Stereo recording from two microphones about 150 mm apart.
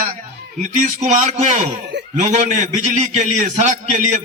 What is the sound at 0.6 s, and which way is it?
A man's voice, 55° right (ahead or behind).